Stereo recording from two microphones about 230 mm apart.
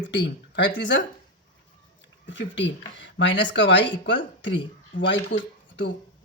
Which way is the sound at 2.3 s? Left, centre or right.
Left.